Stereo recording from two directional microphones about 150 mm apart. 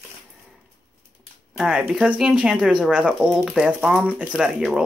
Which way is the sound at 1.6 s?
Centre (ahead or behind).